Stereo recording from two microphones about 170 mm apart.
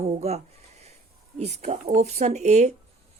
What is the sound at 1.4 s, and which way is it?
Speech, 40° right (ahead or behind).